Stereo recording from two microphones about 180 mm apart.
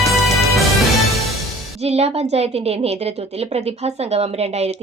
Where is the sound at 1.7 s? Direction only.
35° right (ahead or behind).